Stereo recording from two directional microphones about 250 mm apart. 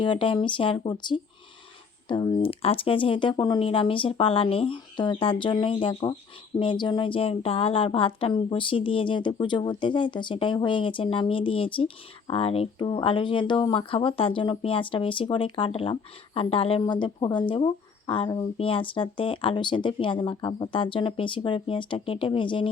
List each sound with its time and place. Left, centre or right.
0.0 s a woman's voice: centre